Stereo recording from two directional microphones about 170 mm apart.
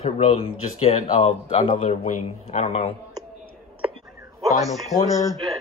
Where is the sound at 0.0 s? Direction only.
35° left (ahead or behind).